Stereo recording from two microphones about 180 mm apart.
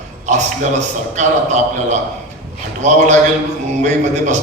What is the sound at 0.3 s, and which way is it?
A man's voice, 40° right (ahead or behind).